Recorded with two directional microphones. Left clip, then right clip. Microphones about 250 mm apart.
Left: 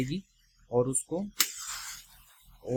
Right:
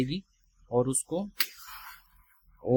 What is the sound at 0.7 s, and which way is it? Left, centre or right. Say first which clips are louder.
Speech: right 1 dB; centre.